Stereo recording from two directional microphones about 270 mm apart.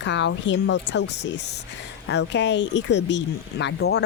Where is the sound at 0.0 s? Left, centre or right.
Left.